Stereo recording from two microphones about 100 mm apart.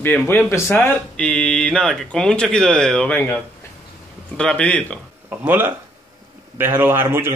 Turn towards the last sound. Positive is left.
turn(degrees=-25)  # may be behind; listen again after turning